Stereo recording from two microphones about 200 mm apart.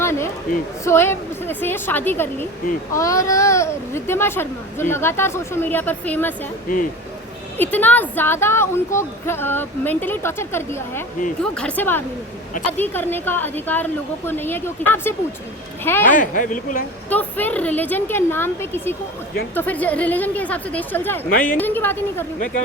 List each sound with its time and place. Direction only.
0.0 s a sound: 15° left (ahead or behind)
0.9 s a child's voice: 10° left (ahead or behind)
6.7 s a woman's voice: 45° left (ahead or behind)
7.6 s a child's voice: 10° left (ahead or behind)
16.0 s speech: 40° left (ahead or behind)
17.1 s a child's voice: 10° left (ahead or behind)
21.2 s a woman's voice: 45° left (ahead or behind)
21.5 s a child's voice: 10° left (ahead or behind)